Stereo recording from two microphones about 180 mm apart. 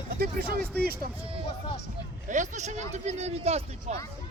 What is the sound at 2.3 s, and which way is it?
Speech, 40° right (ahead or behind).